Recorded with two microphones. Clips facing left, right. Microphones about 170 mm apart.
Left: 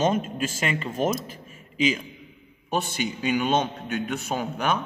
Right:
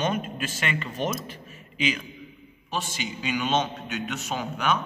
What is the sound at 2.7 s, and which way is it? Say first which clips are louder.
A man's voice: left 5 dB; 55° left (ahead or behind).